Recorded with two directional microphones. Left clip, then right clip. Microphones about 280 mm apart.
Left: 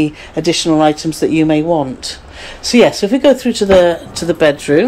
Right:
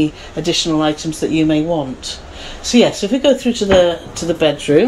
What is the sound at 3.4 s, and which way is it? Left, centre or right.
Speech, left.